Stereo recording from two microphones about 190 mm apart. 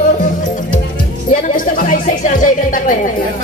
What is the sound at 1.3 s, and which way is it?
Music, 45° left (ahead or behind).